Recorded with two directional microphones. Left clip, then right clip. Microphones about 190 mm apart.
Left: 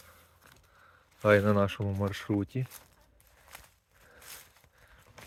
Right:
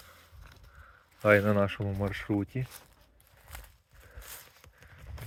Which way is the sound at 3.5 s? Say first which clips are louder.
Right 1 dB; 50° right (ahead or behind).